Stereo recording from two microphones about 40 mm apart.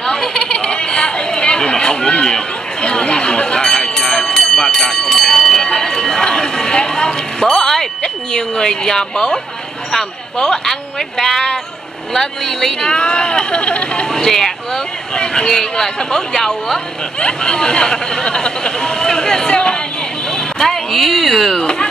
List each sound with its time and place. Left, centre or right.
0.2 s bleat: centre
3.6 s a sound: centre
5.0 s fire alarm: centre
10.5 s speech: centre
12.9 s speech: left
14.0 s speech: centre
17.2 s speech: left
20.2 s a sound: centre